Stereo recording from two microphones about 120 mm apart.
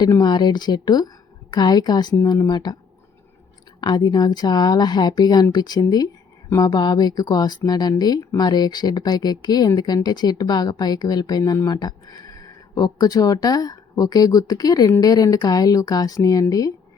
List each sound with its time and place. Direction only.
0.0 s speech: 35° left (ahead or behind)
3.8 s speech: 35° left (ahead or behind)